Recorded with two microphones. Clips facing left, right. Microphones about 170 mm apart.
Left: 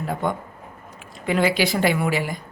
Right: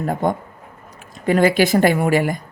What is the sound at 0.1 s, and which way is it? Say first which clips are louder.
Speech: right 3 dB; 45° right (ahead or behind).